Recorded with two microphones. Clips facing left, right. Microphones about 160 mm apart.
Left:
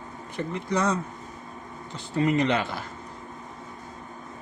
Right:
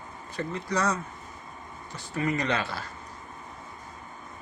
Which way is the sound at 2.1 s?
25° left (ahead or behind).